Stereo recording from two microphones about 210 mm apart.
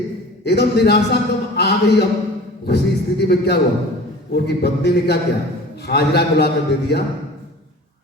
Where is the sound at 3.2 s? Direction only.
50° left (ahead or behind).